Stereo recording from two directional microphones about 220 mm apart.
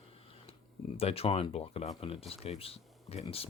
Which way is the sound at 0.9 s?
25° left (ahead or behind).